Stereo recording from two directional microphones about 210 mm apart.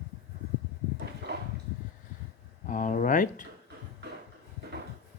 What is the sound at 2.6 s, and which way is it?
Speech, 35° left (ahead or behind).